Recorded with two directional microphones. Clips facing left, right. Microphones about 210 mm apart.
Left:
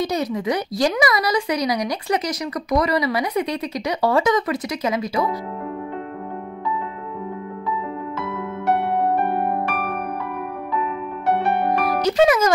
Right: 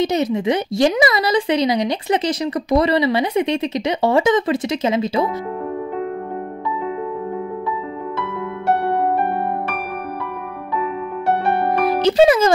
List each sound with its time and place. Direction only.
0.0 s a woman's voice: 25° right (ahead or behind)
11.8 s speech: 30° right (ahead or behind)